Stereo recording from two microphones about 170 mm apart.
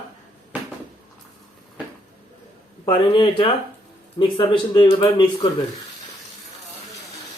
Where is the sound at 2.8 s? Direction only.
30° left (ahead or behind).